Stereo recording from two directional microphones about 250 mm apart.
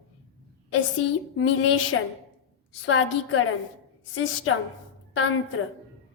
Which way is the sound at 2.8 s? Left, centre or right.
Left.